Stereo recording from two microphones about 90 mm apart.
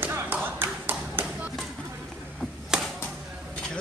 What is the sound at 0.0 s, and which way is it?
Tap, 20° right (ahead or behind).